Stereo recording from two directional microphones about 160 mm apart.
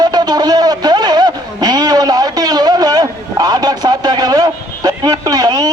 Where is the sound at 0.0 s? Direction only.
25° right (ahead or behind).